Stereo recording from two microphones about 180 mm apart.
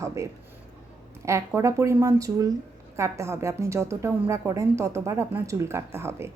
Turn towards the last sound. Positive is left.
turn(degrees=-15)  # may be behind; listen again after turning